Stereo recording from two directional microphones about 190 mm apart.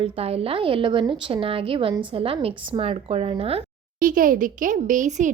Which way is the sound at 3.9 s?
45° right (ahead or behind).